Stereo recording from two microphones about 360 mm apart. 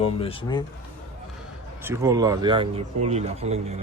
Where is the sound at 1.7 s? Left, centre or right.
Centre.